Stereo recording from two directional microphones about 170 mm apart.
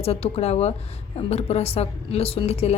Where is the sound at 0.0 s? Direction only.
35° left (ahead or behind).